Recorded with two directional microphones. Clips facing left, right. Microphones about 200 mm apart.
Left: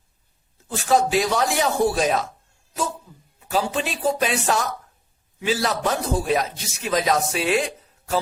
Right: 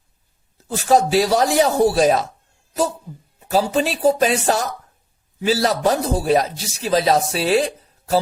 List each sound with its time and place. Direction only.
0.7 s a man's voice: 40° right (ahead or behind)
3.5 s a man's voice: 40° right (ahead or behind)